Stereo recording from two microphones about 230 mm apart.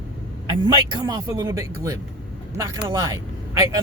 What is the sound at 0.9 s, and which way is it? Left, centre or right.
Speech, centre.